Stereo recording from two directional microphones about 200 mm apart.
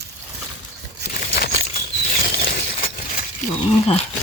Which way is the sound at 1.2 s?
50° left (ahead or behind).